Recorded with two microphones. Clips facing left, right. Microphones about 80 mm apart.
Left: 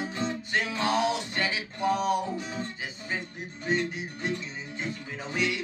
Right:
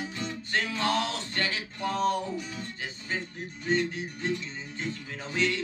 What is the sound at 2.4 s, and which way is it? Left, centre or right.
Guitar, left.